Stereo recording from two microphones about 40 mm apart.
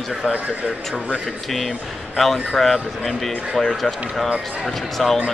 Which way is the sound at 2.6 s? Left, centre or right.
Centre.